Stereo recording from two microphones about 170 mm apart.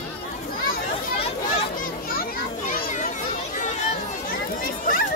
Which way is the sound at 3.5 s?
45° left (ahead or behind).